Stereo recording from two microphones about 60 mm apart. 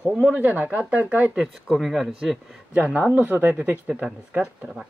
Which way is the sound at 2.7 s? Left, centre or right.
Right.